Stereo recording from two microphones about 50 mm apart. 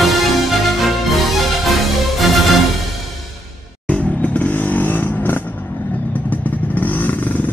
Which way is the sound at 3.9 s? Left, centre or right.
Left.